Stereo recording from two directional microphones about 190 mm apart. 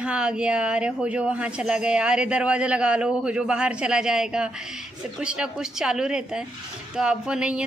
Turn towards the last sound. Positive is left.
turn(degrees=-5)  # may be behind; listen again after turning